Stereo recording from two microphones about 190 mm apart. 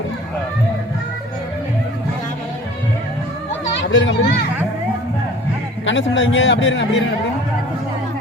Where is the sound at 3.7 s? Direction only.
75° left (ahead or behind).